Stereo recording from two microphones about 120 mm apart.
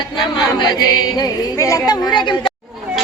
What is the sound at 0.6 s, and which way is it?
Speech, 35° left (ahead or behind).